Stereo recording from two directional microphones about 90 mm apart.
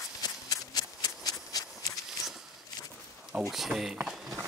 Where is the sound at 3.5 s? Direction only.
5° right (ahead or behind).